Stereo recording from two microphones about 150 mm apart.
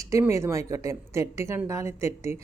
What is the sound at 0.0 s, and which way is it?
A woman's voice, 20° right (ahead or behind).